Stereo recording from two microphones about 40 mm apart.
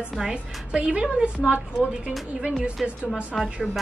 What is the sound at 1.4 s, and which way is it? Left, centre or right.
Speech, right.